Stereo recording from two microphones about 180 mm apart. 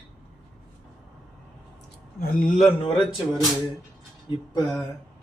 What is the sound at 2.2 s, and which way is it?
Speech, 50° left (ahead or behind).